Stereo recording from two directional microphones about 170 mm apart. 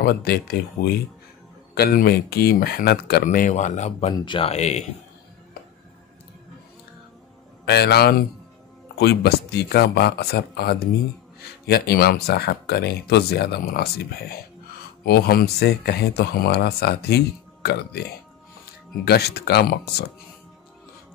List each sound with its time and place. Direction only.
0.0 s speech: 70° left (ahead or behind)
1.8 s speech: 65° left (ahead or behind)
3.3 s speech: 50° left (ahead or behind)
4.2 s speech: 30° left (ahead or behind)
7.6 s speech: 70° left (ahead or behind)
19.0 s speech: 70° left (ahead or behind)